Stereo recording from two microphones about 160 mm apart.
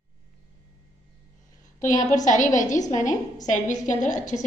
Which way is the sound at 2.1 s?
50° left (ahead or behind).